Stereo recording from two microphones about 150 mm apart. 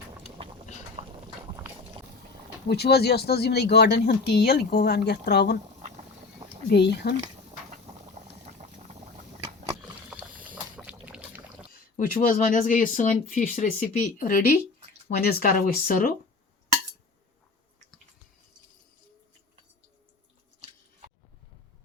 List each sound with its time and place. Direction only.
1.0 s clip-clop: 40° right (ahead or behind)
2.6 s speech: 90° left
6.7 s speech: 90° left
7.9 s boiling: 45° right (ahead or behind)
9.8 s rowboat: 10° right (ahead or behind)
11.0 s pour: 10° right (ahead or behind)
11.7 s speech: 65° left (ahead or behind)
15.2 s speech: 90° left; by 16.1 s 70° left (ahead or behind)